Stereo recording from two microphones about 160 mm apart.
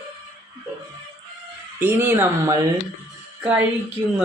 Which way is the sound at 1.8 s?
15° right (ahead or behind).